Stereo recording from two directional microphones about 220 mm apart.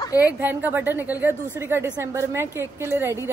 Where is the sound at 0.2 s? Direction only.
10° right (ahead or behind).